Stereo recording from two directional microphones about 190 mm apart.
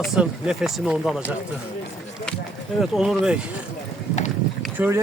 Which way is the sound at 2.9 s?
Centre (ahead or behind).